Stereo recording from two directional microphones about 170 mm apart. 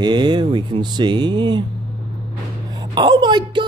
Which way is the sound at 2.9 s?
25° right (ahead or behind).